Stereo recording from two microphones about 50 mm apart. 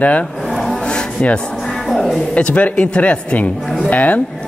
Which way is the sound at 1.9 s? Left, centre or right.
Centre.